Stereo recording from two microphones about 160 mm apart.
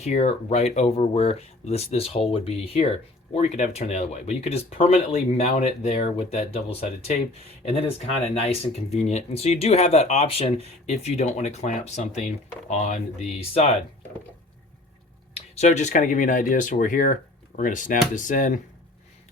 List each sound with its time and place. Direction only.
0.0 s speech: 45° left (ahead or behind)
15.4 s speech: 45° left (ahead or behind)